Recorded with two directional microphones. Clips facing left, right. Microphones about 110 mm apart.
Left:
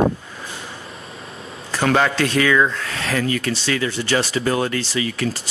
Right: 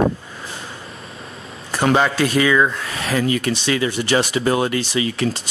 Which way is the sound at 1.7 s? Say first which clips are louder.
Right 1 dB; 15° right (ahead or behind).